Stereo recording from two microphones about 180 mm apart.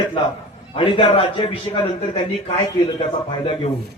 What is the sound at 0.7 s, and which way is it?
A man's voice, 30° left (ahead or behind).